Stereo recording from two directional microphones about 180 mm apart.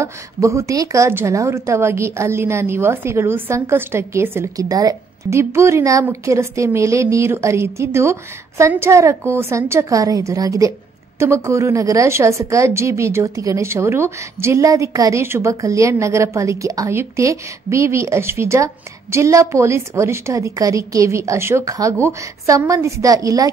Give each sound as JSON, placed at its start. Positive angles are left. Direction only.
{"t": 0.0, "sound": "a woman's voice", "side_deg": -15}